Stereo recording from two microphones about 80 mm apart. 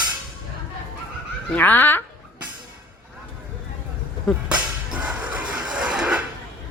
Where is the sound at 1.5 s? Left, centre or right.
Left.